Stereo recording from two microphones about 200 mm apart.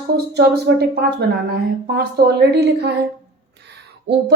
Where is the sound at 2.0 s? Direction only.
55° right (ahead or behind).